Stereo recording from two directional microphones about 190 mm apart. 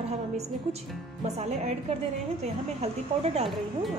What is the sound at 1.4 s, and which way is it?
Speech, 35° right (ahead or behind).